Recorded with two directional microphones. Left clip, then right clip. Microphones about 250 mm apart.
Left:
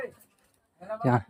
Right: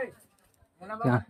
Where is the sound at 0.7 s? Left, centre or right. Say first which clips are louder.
Left 2 dB; centre.